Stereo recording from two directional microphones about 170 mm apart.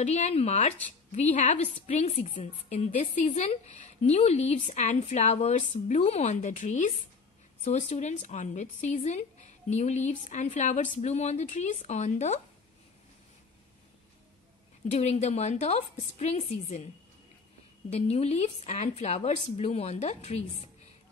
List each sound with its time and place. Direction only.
0.0 s a woman's voice: 40° left (ahead or behind)
14.9 s a woman's voice: 40° left (ahead or behind)